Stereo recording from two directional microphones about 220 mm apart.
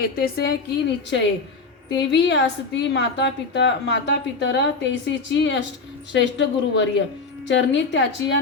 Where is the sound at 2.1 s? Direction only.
55° left (ahead or behind).